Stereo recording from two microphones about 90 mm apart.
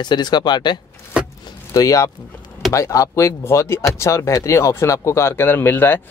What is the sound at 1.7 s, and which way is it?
Speech, 35° left (ahead or behind).